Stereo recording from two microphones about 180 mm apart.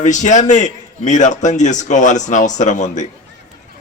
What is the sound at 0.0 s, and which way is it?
A man's voice, 40° left (ahead or behind).